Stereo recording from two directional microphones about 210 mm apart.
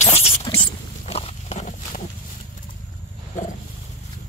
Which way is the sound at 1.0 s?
30° left (ahead or behind).